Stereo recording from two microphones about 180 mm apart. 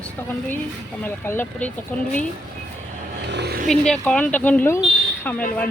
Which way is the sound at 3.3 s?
65° right (ahead or behind).